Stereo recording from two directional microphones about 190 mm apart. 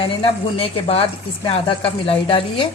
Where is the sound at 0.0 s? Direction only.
30° left (ahead or behind).